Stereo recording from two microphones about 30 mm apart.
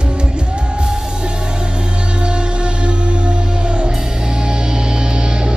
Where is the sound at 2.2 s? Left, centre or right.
Right.